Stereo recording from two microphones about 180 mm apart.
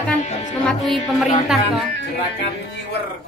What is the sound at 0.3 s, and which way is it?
Music, 40° left (ahead or behind).